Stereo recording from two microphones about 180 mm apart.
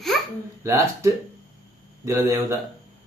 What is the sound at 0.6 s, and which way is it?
Speech, 15° right (ahead or behind).